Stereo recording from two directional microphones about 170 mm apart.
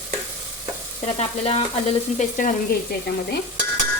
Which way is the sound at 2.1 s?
50° left (ahead or behind).